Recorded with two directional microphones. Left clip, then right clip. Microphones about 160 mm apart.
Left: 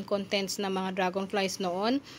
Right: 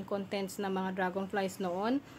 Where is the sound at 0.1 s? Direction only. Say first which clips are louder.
Left 6 dB; 15° left (ahead or behind).